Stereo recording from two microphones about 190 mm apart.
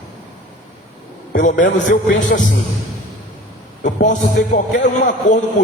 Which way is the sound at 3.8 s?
40° left (ahead or behind).